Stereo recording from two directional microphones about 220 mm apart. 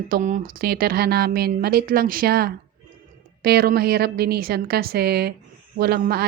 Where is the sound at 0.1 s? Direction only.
35° right (ahead or behind).